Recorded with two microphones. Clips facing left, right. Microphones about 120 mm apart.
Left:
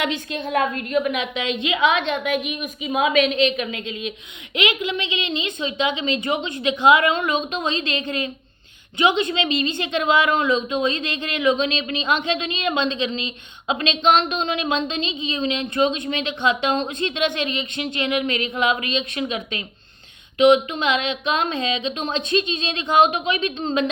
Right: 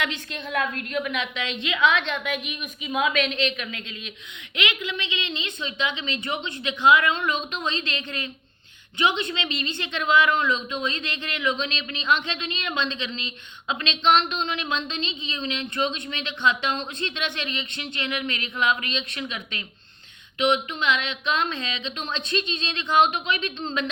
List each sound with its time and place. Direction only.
0.0 s a woman's voice: 10° left (ahead or behind)